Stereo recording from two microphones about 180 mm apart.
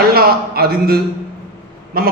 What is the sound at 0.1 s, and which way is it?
A man's voice, 60° right (ahead or behind).